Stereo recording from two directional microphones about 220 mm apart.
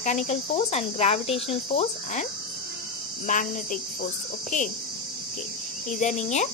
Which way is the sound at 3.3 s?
35° left (ahead or behind).